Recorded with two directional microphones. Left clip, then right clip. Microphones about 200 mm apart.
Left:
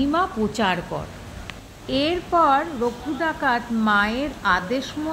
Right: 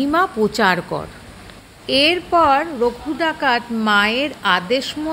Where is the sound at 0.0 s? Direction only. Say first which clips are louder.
Right 5 dB; 55° right (ahead or behind).